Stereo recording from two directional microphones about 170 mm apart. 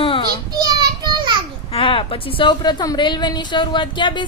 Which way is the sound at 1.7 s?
35° left (ahead or behind).